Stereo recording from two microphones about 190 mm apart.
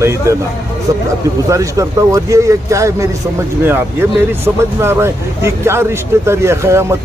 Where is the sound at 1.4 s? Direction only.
15° right (ahead or behind).